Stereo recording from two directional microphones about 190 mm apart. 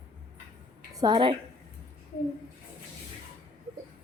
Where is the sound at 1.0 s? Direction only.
25° right (ahead or behind).